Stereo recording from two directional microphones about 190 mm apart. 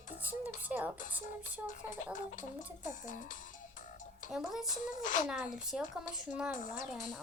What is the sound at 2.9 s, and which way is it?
Speech, 40° left (ahead or behind).